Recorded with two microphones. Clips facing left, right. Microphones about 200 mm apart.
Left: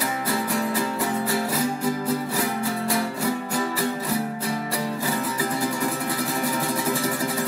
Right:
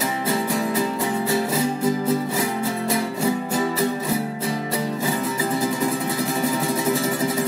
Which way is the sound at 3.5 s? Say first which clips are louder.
Right 3 dB; 20° right (ahead or behind).